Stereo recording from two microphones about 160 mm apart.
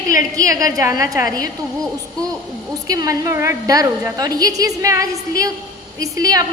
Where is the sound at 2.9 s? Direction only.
20° right (ahead or behind).